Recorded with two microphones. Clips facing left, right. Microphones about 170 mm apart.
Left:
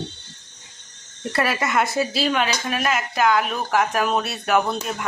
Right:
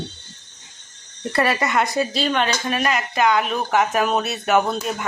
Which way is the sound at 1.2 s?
Centre (ahead or behind).